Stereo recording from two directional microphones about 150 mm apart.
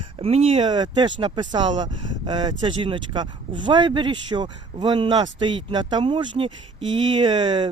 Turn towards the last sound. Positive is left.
turn(degrees=-30)  # may be behind; listen again after turning